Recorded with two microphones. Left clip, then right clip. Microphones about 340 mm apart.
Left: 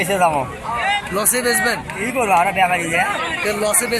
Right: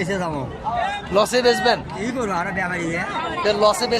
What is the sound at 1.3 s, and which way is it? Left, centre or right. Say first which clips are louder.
Speech: left 2 dB; right.